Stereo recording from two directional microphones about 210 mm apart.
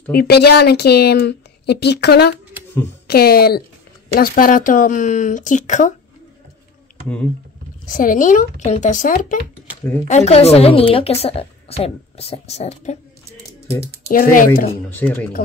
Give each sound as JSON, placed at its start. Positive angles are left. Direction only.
{"t": 0.1, "sound": "speech", "side_deg": 50}
{"t": 7.8, "sound": "a woman's voice", "side_deg": 40}
{"t": 14.0, "sound": "speech", "side_deg": 40}
{"t": 14.9, "sound": "speech", "side_deg": 10}